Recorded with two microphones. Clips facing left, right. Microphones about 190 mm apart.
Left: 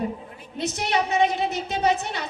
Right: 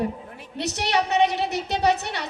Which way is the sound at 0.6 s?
70° right (ahead or behind).